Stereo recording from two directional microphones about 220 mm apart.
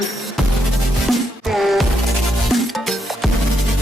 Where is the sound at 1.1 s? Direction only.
Centre (ahead or behind).